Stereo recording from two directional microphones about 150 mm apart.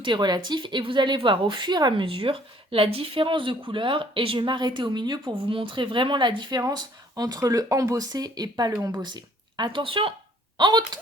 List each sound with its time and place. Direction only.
0.0 s a woman's voice: 30° right (ahead or behind)